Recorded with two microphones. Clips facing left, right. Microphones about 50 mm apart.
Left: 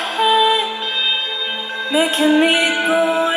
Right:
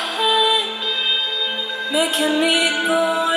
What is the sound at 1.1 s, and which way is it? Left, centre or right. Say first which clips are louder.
Music: left 1 dB; left.